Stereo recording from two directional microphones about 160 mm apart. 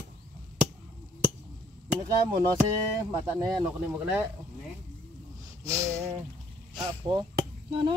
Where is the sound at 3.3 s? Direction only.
15° right (ahead or behind).